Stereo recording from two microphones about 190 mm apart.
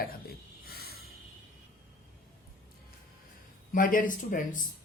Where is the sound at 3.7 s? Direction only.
45° left (ahead or behind).